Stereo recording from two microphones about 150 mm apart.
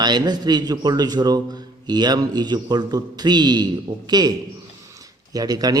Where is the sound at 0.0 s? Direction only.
30° right (ahead or behind).